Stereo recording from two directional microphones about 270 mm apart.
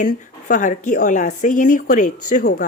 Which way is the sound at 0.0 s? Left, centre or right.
Left.